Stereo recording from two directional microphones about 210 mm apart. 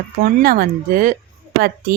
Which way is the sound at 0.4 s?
45° right (ahead or behind).